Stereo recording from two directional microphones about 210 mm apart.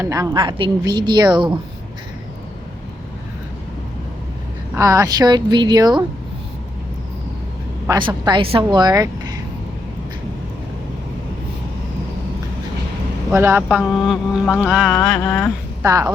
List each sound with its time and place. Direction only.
0.0 s a woman's voice: 15° right (ahead or behind)
4.7 s speech: 15° right (ahead or behind)
7.9 s a woman's voice: 20° right (ahead or behind)
13.3 s speech: 10° right (ahead or behind)
14.9 s a sound: 5° left (ahead or behind)
15.8 s speech: 15° right (ahead or behind)